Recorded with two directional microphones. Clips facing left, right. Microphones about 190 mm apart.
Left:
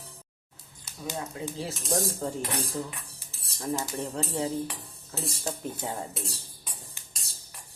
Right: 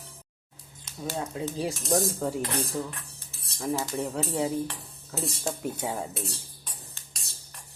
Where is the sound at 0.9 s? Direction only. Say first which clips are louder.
Right 4 dB; 5° left (ahead or behind).